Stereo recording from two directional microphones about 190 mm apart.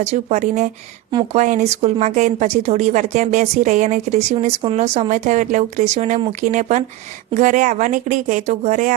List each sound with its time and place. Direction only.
0.0 s a woman's voice: 35° right (ahead or behind)